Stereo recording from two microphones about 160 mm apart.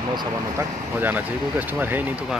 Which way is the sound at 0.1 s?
25° right (ahead or behind).